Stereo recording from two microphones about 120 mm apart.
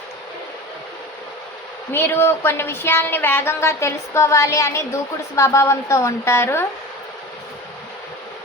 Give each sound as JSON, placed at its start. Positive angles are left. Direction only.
{"t": 1.9, "sound": "a woman's voice", "side_deg": 20}